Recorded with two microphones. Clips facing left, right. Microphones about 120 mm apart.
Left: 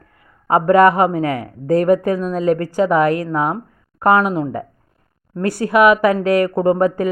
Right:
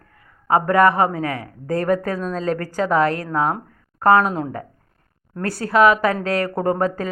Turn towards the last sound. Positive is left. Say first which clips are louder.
# left 5 dB
turn(degrees=15)  # may be behind; listen again after turning